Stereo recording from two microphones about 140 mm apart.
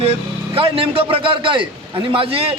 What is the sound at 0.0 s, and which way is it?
A man's voice, 40° right (ahead or behind).